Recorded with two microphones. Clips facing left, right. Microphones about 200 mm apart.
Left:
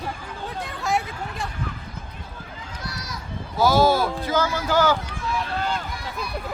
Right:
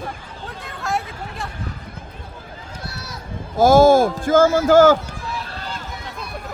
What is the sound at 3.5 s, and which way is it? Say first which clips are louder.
Speech: right 7 dB; 50° right (ahead or behind).